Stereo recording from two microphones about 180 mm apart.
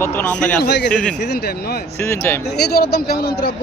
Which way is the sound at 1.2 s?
70° left (ahead or behind).